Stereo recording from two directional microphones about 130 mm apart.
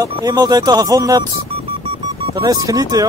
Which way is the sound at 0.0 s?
30° right (ahead or behind).